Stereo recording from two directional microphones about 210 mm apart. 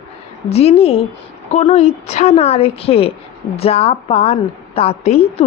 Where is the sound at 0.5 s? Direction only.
30° left (ahead or behind).